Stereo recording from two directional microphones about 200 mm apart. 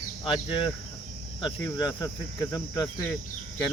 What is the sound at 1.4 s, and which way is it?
Cricket, 20° left (ahead or behind).